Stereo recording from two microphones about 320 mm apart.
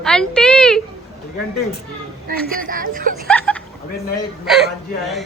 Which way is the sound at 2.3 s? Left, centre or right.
Right.